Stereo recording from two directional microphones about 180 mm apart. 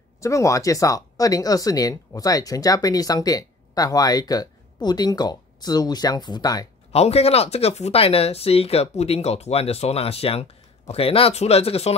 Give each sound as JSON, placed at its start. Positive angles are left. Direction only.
{"t": 0.2, "sound": "speech", "side_deg": 15}
{"t": 6.9, "sound": "speech", "side_deg": 35}